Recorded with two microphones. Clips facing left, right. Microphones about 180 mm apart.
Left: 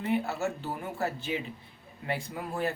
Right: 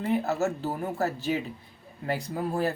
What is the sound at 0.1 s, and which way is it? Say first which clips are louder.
A man's voice: right 3 dB; 40° right (ahead or behind).